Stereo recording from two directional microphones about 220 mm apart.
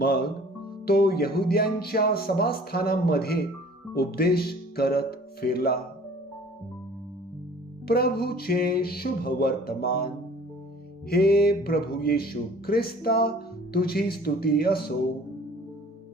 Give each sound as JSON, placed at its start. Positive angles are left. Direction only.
{"t": 0.0, "sound": "speech", "side_deg": 45}
{"t": 7.9, "sound": "speech", "side_deg": 45}
{"t": 11.1, "sound": "speech", "side_deg": 45}